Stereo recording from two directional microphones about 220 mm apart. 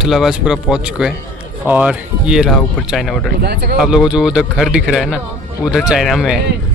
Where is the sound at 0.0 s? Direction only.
Centre (ahead or behind).